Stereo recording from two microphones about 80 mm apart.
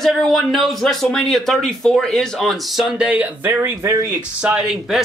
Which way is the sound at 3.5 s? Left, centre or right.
Right.